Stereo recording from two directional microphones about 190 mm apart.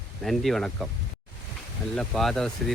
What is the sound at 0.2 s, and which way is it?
Speech, centre (ahead or behind).